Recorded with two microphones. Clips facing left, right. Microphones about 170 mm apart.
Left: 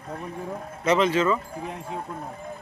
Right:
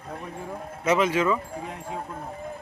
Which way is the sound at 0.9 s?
10° right (ahead or behind).